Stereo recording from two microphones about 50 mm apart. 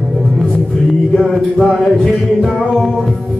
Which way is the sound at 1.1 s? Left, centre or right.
Centre.